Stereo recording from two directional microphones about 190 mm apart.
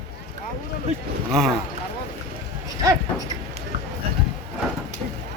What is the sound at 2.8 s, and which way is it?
Speech, 20° right (ahead or behind).